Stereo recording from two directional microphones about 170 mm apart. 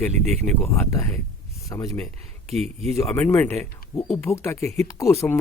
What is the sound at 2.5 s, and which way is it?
Speech, 40° right (ahead or behind).